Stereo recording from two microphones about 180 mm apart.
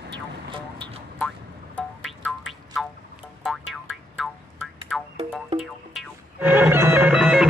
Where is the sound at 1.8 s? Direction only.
5° left (ahead or behind).